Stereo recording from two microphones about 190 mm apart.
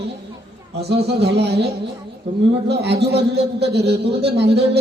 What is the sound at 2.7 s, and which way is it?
A man's voice, 60° right (ahead or behind).